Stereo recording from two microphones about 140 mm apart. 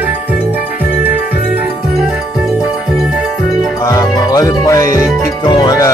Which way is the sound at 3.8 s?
25° left (ahead or behind).